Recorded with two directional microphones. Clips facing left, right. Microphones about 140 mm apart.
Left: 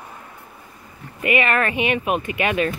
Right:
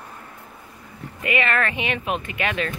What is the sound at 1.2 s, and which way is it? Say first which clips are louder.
Speech: left 3 dB; 15° left (ahead or behind).